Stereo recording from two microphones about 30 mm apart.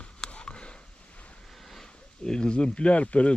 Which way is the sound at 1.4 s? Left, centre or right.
Centre.